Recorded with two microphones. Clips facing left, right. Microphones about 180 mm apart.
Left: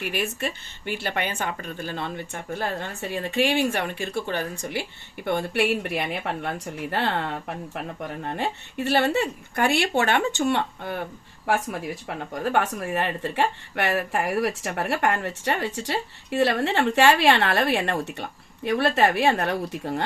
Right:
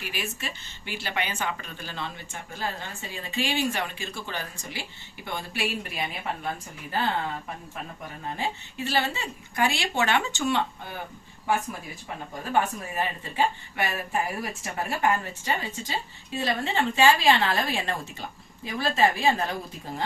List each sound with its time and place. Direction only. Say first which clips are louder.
0.0 s speech: left 7 dB; 55° left (ahead or behind)
11.4 s speech: left 3 dB; 75° left (ahead or behind)